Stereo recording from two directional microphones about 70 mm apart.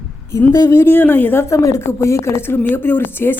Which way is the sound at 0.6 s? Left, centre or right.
Left.